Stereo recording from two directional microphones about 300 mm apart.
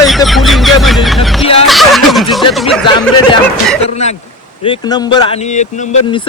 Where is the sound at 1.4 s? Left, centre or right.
Centre.